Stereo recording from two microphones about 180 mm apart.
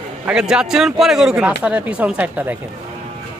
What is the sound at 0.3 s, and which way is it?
A man's voice, 5° right (ahead or behind).